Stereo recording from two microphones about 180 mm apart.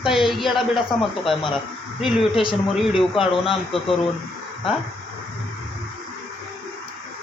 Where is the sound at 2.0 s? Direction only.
Centre (ahead or behind).